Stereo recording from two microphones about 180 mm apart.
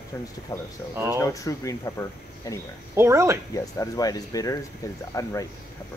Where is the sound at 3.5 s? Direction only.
20° left (ahead or behind).